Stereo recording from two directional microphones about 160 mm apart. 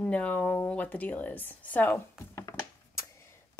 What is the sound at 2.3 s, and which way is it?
Thunk, 20° left (ahead or behind).